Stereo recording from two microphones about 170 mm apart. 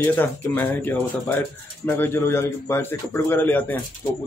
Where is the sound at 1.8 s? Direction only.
10° left (ahead or behind).